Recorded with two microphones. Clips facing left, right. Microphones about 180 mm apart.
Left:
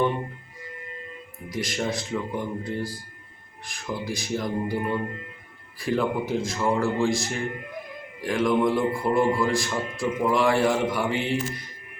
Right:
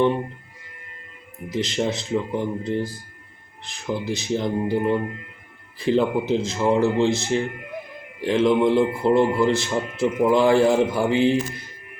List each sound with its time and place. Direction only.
1.5 s a man's voice: 25° right (ahead or behind)